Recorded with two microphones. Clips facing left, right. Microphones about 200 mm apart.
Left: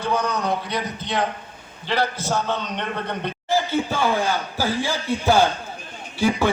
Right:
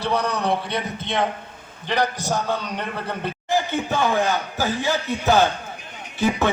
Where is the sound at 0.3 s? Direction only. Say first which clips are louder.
Right 1 dB; 30° right (ahead or behind); by 2.6 s 15° right (ahead or behind).